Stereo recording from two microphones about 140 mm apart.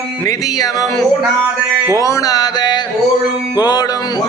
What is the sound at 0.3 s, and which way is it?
Mantra, 25° left (ahead or behind).